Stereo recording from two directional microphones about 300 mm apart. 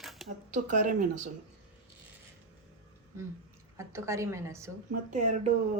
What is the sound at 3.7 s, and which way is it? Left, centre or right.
Speech, centre.